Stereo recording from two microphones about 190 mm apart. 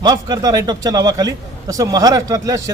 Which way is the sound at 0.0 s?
20° right (ahead or behind).